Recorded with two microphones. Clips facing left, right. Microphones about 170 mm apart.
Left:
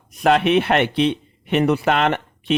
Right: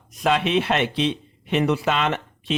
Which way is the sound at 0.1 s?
60° left (ahead or behind).